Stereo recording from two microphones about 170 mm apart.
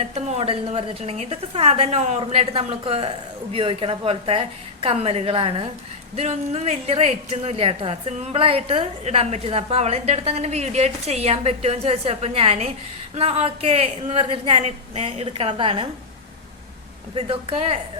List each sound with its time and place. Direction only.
0.0 s a woman's voice: 35° right (ahead or behind)
17.2 s a woman's voice: 35° right (ahead or behind)